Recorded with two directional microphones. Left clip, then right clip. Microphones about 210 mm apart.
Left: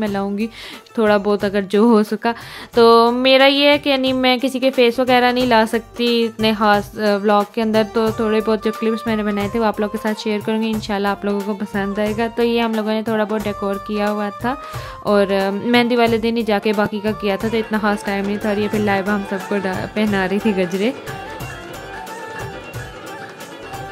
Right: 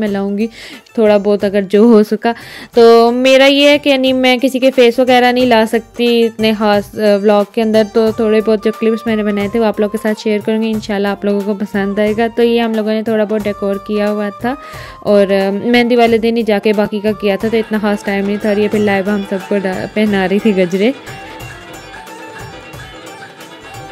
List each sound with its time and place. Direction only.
0.0 s a woman's voice: 10° right (ahead or behind)